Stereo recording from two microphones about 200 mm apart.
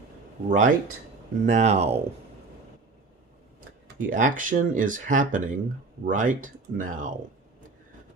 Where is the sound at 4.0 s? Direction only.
40° right (ahead or behind).